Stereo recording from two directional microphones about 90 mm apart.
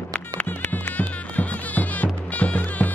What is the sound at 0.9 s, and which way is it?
Music, 15° left (ahead or behind).